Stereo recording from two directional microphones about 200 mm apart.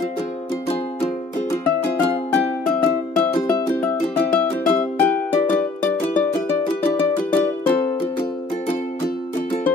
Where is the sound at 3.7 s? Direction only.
5° left (ahead or behind).